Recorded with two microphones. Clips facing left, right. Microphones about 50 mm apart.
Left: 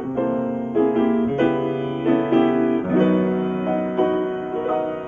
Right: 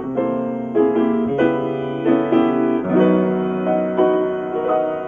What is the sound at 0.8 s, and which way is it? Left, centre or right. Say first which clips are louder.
Music: right 2 dB; centre.